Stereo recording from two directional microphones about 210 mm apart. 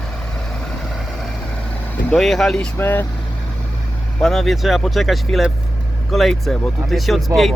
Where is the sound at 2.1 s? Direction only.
Centre (ahead or behind).